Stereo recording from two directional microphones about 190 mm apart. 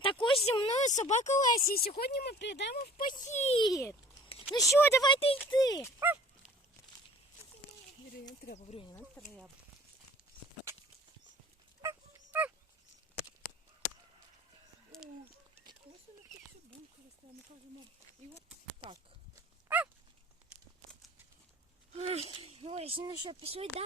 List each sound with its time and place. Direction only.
0.0 s a sound: 25° left (ahead or behind)
0.4 s speech: 30° left (ahead or behind)
3.7 s a child's voice: 15° left (ahead or behind)
6.0 s dog: 10° right (ahead or behind)
8.4 s speech: 35° left (ahead or behind)
9.2 s a child's voice: 10° left (ahead or behind)
11.8 s dog: 10° right (ahead or behind)
14.9 s a sound: 5° left (ahead or behind)
19.4 s dog: 10° right (ahead or behind)
21.9 s speech: 35° right (ahead or behind)